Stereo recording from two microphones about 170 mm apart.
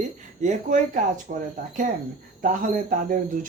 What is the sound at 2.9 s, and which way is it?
Speech, 55° right (ahead or behind).